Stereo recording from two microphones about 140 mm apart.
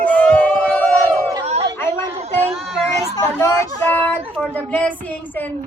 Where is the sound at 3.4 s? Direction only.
15° left (ahead or behind).